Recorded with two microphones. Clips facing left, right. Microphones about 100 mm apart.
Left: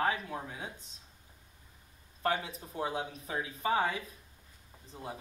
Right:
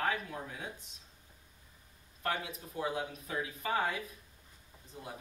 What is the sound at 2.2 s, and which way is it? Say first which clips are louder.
Speech: left 4 dB; 30° left (ahead or behind).